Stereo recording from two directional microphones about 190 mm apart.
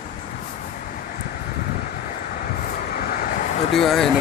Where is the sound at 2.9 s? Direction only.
50° left (ahead or behind).